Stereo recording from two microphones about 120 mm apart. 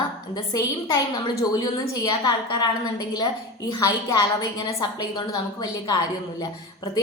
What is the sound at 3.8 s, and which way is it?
A woman's voice, 30° left (ahead or behind).